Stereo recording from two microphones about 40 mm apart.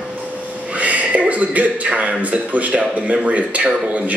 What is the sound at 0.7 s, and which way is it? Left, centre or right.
A man's voice, right.